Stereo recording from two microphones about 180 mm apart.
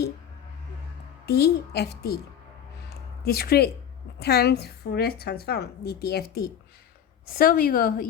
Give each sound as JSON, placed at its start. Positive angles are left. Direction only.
{"t": 1.3, "sound": "a woman's voice", "side_deg": 65}
{"t": 2.9, "sound": "music", "side_deg": 60}
{"t": 4.2, "sound": "a woman's voice", "side_deg": 65}